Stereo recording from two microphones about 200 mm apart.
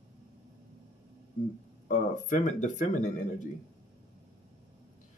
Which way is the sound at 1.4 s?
40° left (ahead or behind).